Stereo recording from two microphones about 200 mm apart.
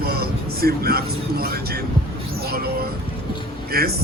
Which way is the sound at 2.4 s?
50° right (ahead or behind).